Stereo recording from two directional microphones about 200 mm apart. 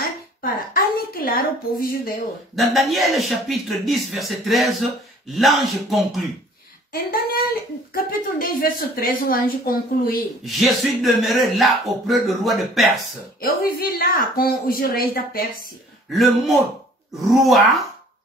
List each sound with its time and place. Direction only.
0.0 s a sound: 45° left (ahead or behind)
2.5 s speech: centre (ahead or behind)
6.9 s a woman's voice: 50° left (ahead or behind)
10.4 s speech: centre (ahead or behind)
13.4 s a woman's voice: 45° left (ahead or behind)
16.1 s speech: centre (ahead or behind)